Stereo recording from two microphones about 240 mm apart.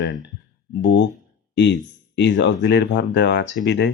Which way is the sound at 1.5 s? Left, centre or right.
Left.